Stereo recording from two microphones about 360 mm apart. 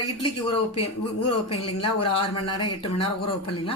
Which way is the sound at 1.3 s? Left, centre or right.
Centre.